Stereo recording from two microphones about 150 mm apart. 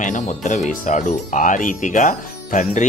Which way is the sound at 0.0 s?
55° left (ahead or behind).